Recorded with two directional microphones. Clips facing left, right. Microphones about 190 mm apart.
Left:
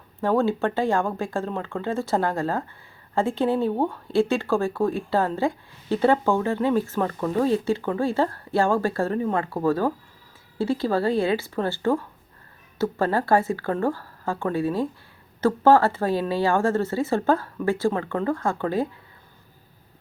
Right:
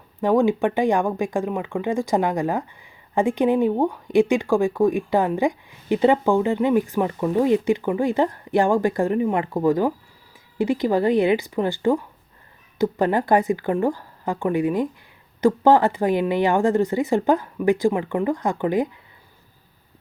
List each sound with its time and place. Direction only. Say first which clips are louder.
0.2 s speech: right 3 dB; 15° right (ahead or behind)